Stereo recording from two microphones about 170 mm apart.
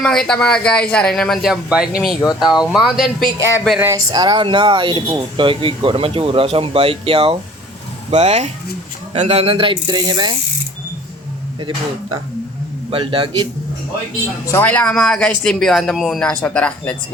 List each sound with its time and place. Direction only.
0.0 s speech: 5° left (ahead or behind)
3.8 s speech: 15° right (ahead or behind)
11.6 s speech: 20° right (ahead or behind)
14.4 s speech: 10° left (ahead or behind)